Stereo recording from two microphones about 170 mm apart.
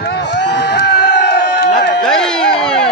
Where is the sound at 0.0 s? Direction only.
85° left.